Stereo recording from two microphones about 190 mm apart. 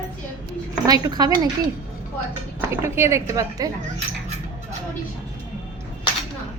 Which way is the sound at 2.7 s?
15° right (ahead or behind).